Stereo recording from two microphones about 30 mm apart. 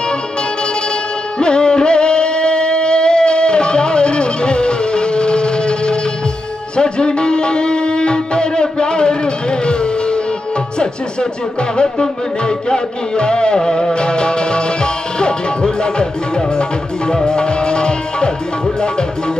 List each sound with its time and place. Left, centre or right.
1.4 s music: left
11.7 s music: left